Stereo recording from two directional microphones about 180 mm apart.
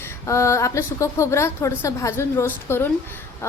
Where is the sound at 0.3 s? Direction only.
15° left (ahead or behind).